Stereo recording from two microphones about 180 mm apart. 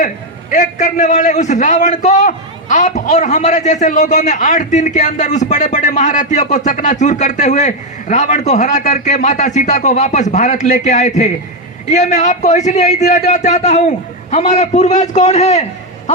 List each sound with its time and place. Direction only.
0.5 s a man's voice: 45° left (ahead or behind)